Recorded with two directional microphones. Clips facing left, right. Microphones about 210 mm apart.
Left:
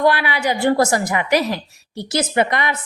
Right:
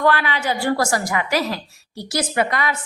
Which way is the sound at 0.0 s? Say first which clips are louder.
Left 2 dB; 15° left (ahead or behind).